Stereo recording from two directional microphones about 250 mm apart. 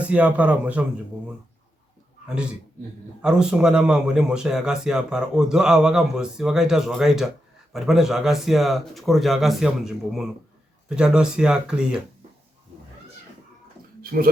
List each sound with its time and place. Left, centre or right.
0.0 s a man's voice: centre
2.2 s a man's voice: centre
14.0 s a sound: right